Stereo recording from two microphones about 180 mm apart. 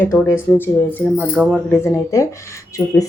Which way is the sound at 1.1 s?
Centre (ahead or behind).